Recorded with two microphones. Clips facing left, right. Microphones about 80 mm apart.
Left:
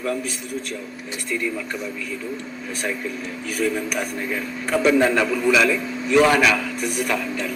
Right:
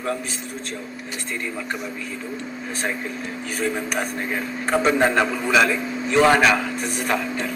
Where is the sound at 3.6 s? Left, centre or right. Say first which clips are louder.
Left 1 dB; right.